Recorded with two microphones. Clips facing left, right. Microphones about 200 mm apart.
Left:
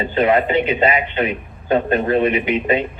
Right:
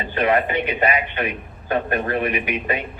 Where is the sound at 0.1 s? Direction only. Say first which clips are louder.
Left 3 dB; 25° left (ahead or behind).